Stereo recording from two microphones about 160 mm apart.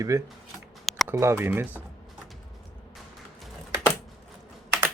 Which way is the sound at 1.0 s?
15° right (ahead or behind).